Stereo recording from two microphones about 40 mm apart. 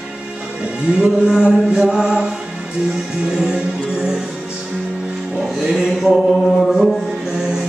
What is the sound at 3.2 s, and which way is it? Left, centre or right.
Mantra, centre.